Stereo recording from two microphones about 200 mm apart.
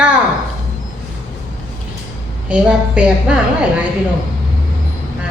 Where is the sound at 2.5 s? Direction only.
5° right (ahead or behind).